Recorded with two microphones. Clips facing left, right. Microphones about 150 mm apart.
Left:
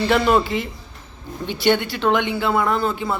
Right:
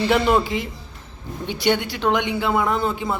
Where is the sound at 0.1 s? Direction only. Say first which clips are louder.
Left 1 dB; 15° right (ahead or behind).